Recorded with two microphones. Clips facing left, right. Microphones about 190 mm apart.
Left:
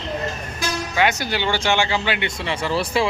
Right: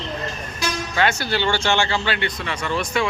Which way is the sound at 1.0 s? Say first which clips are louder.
Even; 15° left (ahead or behind).